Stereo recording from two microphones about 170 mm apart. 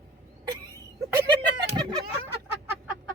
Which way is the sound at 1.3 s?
25° right (ahead or behind).